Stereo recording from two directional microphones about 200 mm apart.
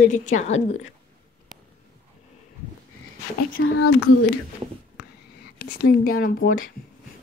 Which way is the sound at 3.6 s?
65° left (ahead or behind).